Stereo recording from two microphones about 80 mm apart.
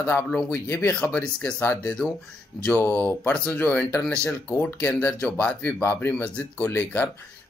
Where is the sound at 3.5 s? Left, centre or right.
Left.